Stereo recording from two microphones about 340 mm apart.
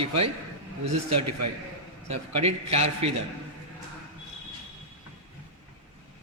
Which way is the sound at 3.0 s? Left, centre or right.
Right.